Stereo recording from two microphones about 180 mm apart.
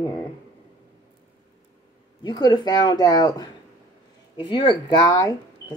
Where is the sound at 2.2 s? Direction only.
25° left (ahead or behind).